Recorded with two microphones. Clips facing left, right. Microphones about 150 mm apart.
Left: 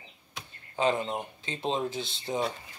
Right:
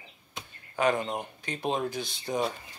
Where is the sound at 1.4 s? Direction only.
20° left (ahead or behind).